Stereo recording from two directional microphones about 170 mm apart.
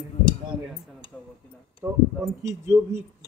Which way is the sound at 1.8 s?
15° right (ahead or behind).